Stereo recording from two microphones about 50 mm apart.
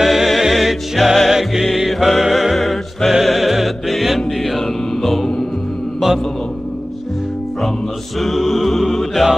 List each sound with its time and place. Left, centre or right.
0.0 s music: centre
5.9 s mantra: centre
8.2 s music: centre